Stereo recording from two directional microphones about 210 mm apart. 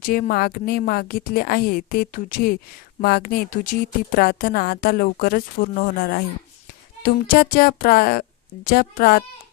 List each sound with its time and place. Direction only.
0.0 s a woman's voice: 45° left (ahead or behind)